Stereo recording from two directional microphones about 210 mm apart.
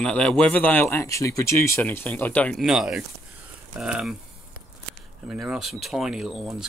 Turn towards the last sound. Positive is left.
turn(degrees=0)  # may be behind; listen again after turning